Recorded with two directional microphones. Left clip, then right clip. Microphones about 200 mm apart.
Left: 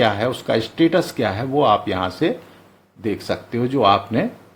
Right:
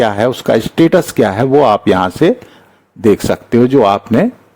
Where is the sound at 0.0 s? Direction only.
50° right (ahead or behind).